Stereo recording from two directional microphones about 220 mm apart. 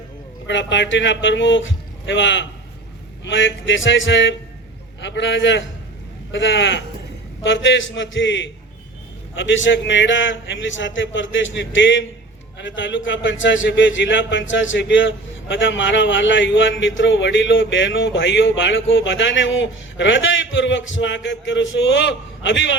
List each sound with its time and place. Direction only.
0.4 s a man's voice: 55° left (ahead or behind)